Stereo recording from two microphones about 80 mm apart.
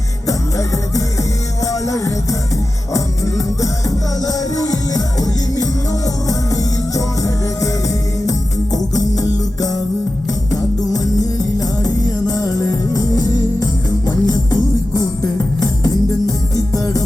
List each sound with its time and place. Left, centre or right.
0.3 s music: left